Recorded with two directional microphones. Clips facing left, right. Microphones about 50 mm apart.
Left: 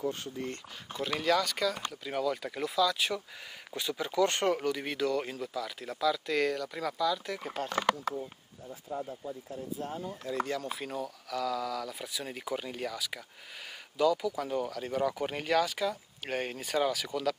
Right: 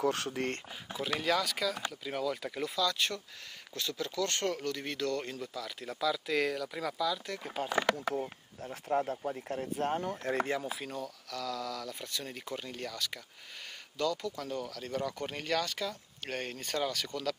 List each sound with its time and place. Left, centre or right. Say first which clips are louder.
0.0 s speech: right 3 dB; right
0.9 s speech: left 2 dB; centre
7.9 s speech: right 2 dB; right
10.7 s speech: left 2 dB; centre